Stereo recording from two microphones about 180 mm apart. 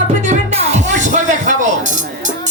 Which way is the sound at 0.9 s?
45° right (ahead or behind).